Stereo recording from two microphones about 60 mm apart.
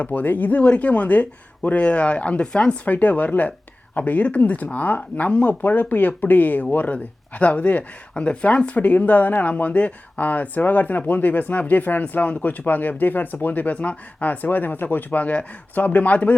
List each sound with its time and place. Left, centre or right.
0.0 s speech: left